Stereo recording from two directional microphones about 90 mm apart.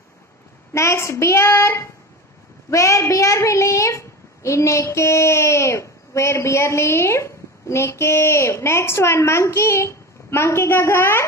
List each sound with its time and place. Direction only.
0.7 s a child's voice: 30° left (ahead or behind)